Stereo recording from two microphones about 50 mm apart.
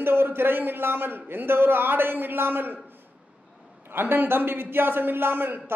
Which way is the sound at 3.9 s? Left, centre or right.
Right.